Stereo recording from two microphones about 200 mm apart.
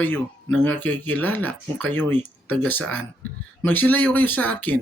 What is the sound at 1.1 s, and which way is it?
Speech, 10° left (ahead or behind).